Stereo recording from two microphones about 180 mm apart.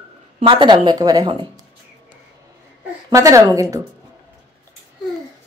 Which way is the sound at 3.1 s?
15° right (ahead or behind).